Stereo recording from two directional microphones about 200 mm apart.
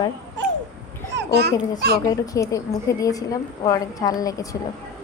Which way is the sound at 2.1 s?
15° left (ahead or behind).